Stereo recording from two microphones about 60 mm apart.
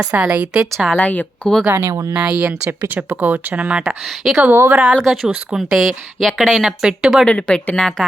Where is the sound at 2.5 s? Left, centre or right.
Right.